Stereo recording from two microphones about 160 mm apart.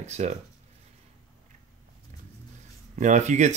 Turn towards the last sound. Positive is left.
turn(degrees=-45)  # may be behind; listen again after turning